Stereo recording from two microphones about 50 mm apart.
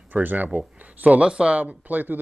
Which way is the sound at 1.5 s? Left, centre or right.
Right.